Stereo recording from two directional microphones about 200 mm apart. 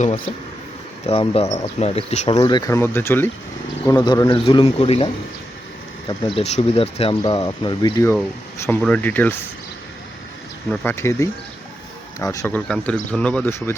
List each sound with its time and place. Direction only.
1.0 s speech: 30° left (ahead or behind)
2.4 s speech: 20° left (ahead or behind)
10.7 s speech: 10° left (ahead or behind)